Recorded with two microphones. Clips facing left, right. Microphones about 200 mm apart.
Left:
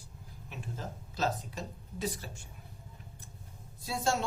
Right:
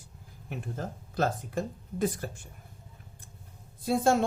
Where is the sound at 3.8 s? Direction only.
55° right (ahead or behind).